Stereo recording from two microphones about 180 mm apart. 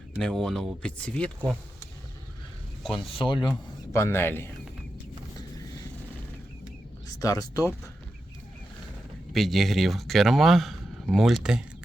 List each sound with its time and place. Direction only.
0.2 s speech: 5° left (ahead or behind)
2.8 s speech: centre (ahead or behind)
3.1 s speech: 30° left (ahead or behind)
3.5 s a man's voice: 10° left (ahead or behind)
7.1 s speech: 20° left (ahead or behind)
9.3 s speech: centre (ahead or behind)